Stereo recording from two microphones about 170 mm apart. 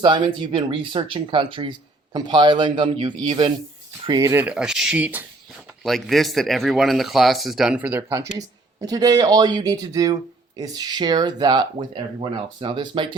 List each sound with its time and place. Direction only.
0.0 s speech: 25° right (ahead or behind); by 8.2 s 10° right (ahead or behind)
8.4 s speech: 20° right (ahead or behind)